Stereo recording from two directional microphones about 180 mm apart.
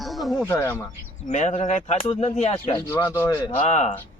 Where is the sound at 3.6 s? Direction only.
40° left (ahead or behind).